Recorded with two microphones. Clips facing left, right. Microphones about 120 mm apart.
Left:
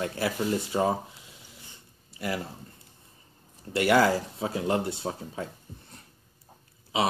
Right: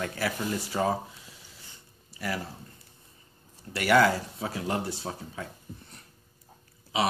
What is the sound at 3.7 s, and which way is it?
Speech, 25° left (ahead or behind).